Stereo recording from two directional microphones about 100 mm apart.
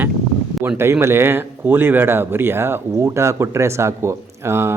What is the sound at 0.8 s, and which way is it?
A man's voice, 25° right (ahead or behind).